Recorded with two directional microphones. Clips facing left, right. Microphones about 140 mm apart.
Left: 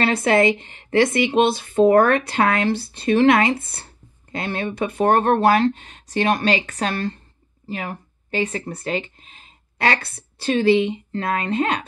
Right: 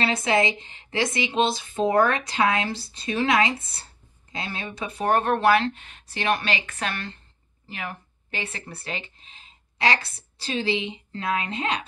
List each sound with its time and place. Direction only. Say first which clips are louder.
0.0 s speech: left 6 dB; 60° left (ahead or behind)